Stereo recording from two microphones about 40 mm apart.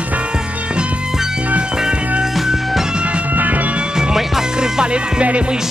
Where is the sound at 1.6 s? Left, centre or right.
Centre.